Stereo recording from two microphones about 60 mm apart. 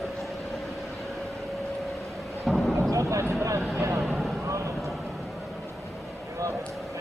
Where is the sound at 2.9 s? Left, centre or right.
Right.